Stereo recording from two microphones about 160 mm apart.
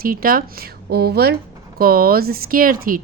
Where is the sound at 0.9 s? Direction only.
75° right (ahead or behind).